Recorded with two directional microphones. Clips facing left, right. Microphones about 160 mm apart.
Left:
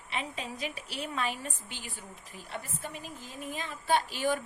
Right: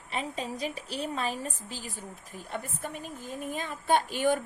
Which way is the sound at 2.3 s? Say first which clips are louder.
Right 3 dB; 50° right (ahead or behind).